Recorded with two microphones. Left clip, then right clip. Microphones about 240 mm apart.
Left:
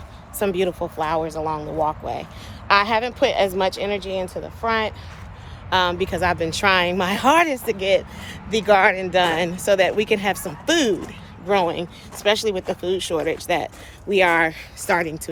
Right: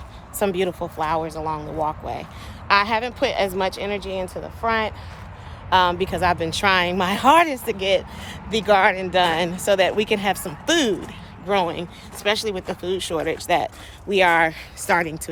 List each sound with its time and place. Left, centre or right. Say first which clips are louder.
0.3 s speech: left 1 dB; centre